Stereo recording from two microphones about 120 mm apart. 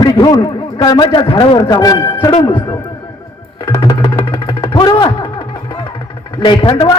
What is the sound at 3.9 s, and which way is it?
Music, 45° left (ahead or behind).